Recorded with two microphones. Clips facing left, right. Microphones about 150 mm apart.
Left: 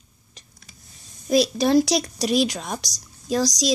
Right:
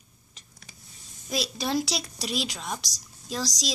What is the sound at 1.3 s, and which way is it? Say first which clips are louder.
Speech: left 11 dB; 45° left (ahead or behind).